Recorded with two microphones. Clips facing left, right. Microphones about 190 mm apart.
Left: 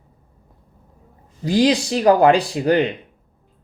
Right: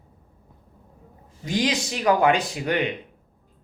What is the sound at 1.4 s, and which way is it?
Speech, 35° left (ahead or behind).